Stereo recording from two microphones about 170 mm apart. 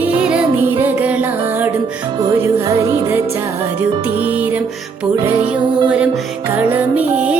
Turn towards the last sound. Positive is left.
turn(degrees=-10)  # may be behind; listen again after turning